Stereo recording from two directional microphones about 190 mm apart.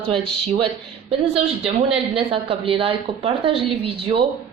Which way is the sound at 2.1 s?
30° right (ahead or behind).